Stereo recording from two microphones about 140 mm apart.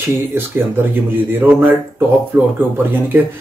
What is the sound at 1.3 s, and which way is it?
Speech, 10° right (ahead or behind).